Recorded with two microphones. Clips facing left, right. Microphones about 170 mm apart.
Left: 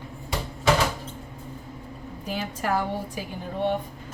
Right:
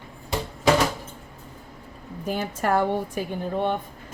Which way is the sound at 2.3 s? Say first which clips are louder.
Right 3 dB; 50° right (ahead or behind).